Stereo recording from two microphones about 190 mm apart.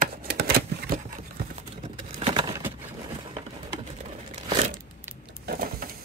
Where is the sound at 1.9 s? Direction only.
25° right (ahead or behind).